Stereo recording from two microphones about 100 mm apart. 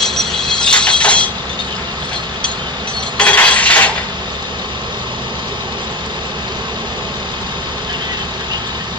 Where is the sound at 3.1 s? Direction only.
15° left (ahead or behind).